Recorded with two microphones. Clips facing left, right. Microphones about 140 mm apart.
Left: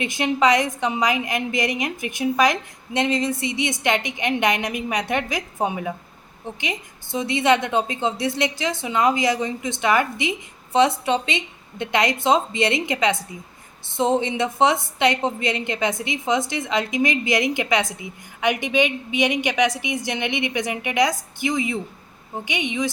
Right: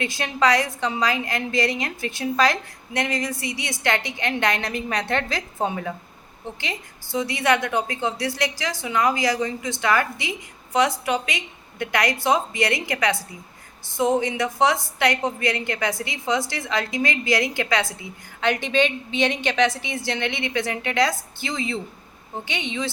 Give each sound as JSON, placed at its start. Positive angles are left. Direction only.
{"t": 0.0, "sound": "a woman's voice", "side_deg": 20}